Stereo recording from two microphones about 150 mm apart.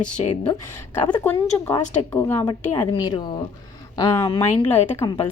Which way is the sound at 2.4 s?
30° left (ahead or behind).